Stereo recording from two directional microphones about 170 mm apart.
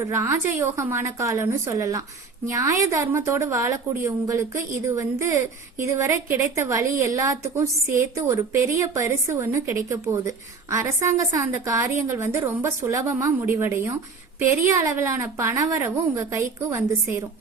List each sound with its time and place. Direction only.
0.0 s a woman's voice: 15° right (ahead or behind)